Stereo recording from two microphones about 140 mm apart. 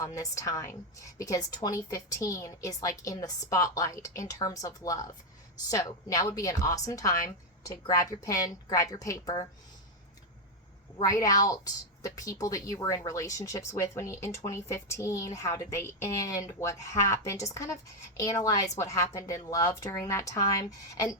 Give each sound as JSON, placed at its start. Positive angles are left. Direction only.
{"t": 0.0, "sound": "a woman's voice", "side_deg": 25}
{"t": 11.0, "sound": "a woman's voice", "side_deg": 25}